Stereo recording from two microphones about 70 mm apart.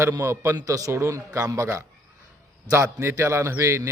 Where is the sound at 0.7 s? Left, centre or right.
Right.